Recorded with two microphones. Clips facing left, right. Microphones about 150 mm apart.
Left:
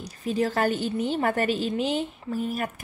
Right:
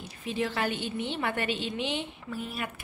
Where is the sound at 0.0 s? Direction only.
40° left (ahead or behind).